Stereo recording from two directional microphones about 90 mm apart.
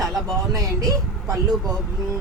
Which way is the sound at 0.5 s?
40° right (ahead or behind).